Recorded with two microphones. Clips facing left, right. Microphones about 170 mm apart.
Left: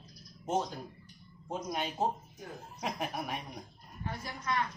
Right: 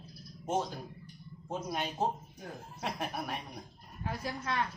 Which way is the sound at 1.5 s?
Centre (ahead or behind).